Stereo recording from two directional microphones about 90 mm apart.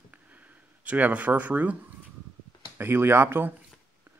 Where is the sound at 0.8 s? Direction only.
15° right (ahead or behind).